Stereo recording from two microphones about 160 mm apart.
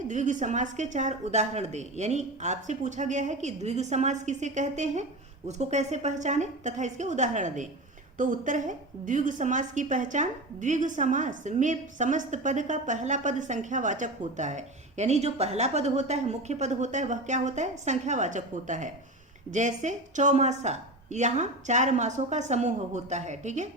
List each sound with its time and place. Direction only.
0.1 s a woman's voice: 50° right (ahead or behind)